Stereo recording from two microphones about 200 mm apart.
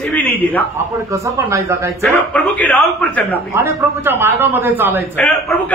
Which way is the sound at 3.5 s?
15° right (ahead or behind).